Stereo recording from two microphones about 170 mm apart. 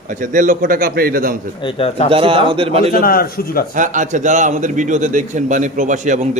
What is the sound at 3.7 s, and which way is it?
A man's voice, 50° right (ahead or behind).